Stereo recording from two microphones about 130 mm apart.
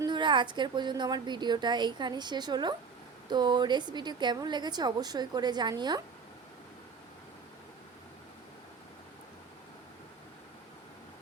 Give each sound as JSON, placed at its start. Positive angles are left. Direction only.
{"t": 0.0, "sound": "a woman's voice", "side_deg": -35}